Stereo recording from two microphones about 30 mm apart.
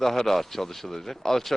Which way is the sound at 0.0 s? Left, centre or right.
Centre.